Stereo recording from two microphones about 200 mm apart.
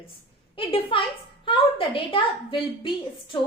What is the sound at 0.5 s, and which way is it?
A woman's voice, 25° left (ahead or behind).